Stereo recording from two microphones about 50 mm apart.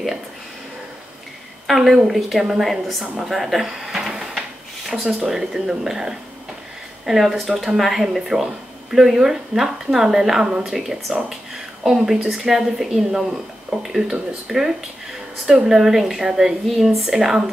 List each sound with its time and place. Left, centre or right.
1.7 s speech: centre
3.3 s drawer open or close: centre
4.4 s a woman's voice: centre
10.8 s a woman's voice: centre